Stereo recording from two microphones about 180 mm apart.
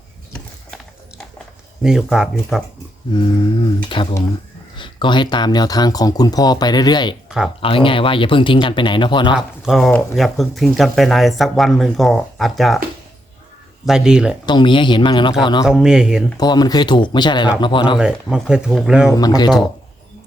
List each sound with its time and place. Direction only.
1.8 s speech: 5° right (ahead or behind)
3.1 s speech: 25° left (ahead or behind)
7.3 s a sound: 5° right (ahead or behind)
7.6 s speech: 30° left (ahead or behind)
9.6 s speech: centre (ahead or behind)
13.8 s speech: 5° right (ahead or behind)
14.4 s speech: 25° left (ahead or behind)
15.6 s speech: 5° right (ahead or behind)
16.4 s speech: 20° left (ahead or behind)
17.9 s speech: 5° right (ahead or behind)
19.1 s speech: 20° left (ahead or behind)